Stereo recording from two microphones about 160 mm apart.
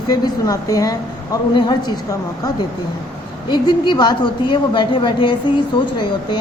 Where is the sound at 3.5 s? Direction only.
30° left (ahead or behind).